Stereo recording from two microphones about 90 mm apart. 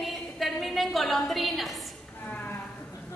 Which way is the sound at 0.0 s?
Centre (ahead or behind).